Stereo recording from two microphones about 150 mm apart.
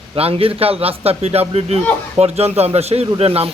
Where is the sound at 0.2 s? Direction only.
40° right (ahead or behind).